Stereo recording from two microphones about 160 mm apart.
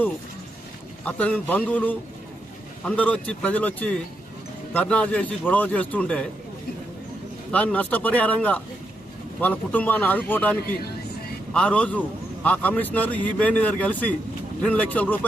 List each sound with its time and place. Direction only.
1.0 s a man's voice: 10° left (ahead or behind)
7.5 s a man's voice: 10° left (ahead or behind)